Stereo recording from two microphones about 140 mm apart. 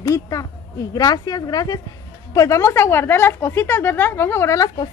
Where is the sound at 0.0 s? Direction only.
25° left (ahead or behind).